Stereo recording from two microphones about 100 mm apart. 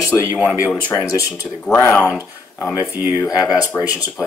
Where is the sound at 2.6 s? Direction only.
35° left (ahead or behind).